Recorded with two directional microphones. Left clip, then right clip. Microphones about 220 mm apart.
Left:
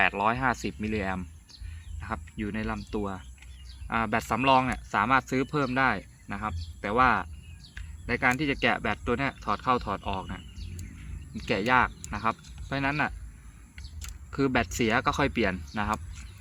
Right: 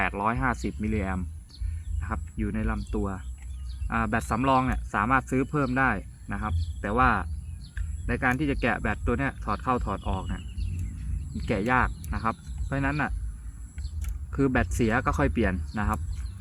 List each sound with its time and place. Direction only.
0.0 s speech: 40° left (ahead or behind)
14.3 s speech: 40° left (ahead or behind)